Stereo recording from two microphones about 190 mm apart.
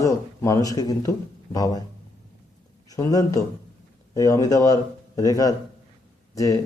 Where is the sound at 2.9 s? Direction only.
20° left (ahead or behind).